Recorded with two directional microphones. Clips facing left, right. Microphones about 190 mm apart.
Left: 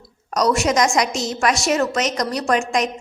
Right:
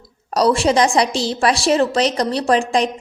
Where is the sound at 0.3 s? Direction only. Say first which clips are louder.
Right 3 dB; 30° right (ahead or behind).